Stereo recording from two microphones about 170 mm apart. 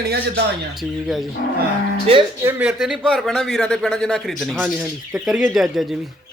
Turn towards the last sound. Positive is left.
turn(degrees=0)  # may be behind; listen again after turning